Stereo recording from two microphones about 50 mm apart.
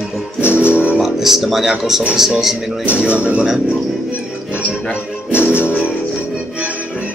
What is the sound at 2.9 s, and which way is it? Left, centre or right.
Speech, right.